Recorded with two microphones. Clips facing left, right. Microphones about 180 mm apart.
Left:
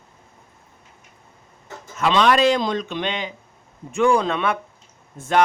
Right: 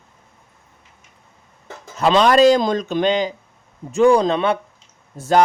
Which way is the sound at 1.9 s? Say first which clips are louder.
Right 4 dB; 35° right (ahead or behind).